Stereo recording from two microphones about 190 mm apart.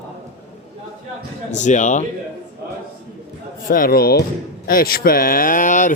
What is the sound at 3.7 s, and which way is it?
Speech, 50° left (ahead or behind).